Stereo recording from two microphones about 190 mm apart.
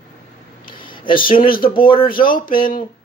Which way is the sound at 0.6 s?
25° left (ahead or behind).